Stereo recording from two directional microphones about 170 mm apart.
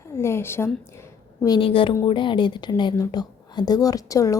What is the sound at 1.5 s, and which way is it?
A woman's voice, 30° left (ahead or behind).